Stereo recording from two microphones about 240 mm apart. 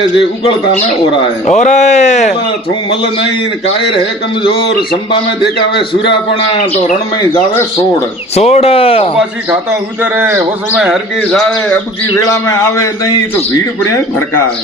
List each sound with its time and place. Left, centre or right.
1.5 s speech: left
8.4 s speech: left
10.0 s speech: centre
12.3 s a man's voice: centre